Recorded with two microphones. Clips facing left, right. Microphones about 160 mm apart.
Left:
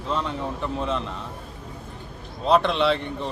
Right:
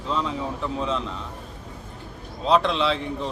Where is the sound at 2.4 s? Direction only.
Centre (ahead or behind).